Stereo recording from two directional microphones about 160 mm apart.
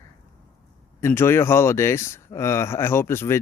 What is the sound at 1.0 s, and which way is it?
Speech, 15° left (ahead or behind).